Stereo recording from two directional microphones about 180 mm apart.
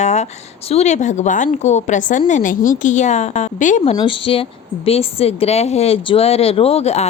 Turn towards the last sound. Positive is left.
turn(degrees=35)  # may be behind; listen again after turning